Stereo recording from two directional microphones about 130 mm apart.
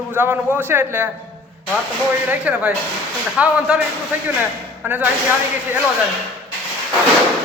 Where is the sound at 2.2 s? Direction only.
10° right (ahead or behind).